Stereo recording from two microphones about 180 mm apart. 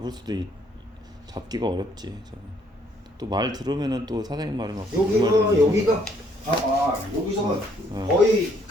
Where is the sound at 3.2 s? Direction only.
20° right (ahead or behind).